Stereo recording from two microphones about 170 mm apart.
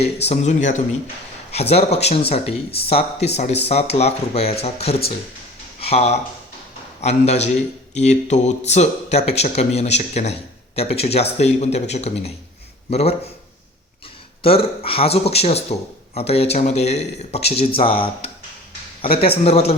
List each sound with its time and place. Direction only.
0.0 s a man's voice: 40° left (ahead or behind)
14.4 s a man's voice: 35° left (ahead or behind)